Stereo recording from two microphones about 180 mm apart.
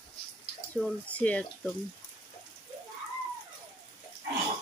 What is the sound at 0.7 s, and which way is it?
Speech, 10° left (ahead or behind).